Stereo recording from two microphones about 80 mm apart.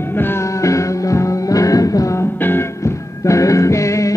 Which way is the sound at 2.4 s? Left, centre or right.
Left.